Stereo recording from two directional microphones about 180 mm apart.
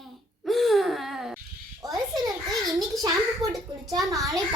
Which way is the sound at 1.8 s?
20° right (ahead or behind).